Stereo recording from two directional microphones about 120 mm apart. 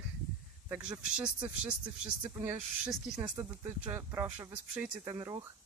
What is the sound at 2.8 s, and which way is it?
Speech, 5° right (ahead or behind).